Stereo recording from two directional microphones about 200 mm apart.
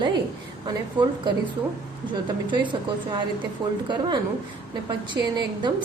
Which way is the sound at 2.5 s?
25° right (ahead or behind).